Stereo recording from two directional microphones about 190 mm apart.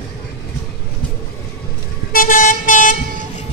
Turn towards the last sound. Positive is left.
turn(degrees=45)  # may be behind; listen again after turning